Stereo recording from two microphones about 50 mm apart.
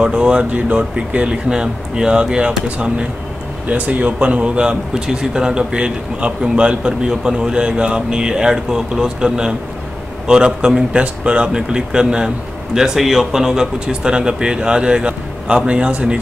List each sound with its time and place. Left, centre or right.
0.0 s speech: centre
3.6 s speech: right